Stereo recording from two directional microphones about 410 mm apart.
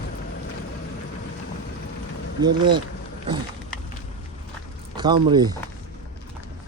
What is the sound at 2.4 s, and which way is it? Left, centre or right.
Speech, centre.